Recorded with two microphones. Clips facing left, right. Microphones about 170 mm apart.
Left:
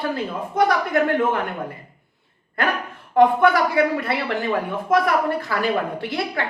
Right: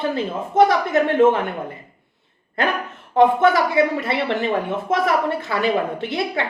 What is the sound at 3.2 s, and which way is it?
A woman's voice, 20° right (ahead or behind).